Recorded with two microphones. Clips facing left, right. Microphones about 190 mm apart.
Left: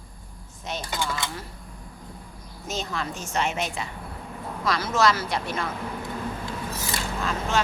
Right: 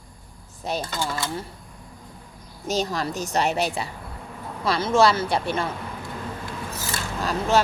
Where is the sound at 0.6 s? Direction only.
35° right (ahead or behind).